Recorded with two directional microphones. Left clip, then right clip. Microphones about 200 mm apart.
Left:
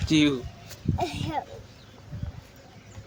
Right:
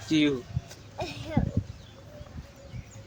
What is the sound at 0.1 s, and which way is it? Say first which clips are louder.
Speech: left 3 dB; 45° left (ahead or behind).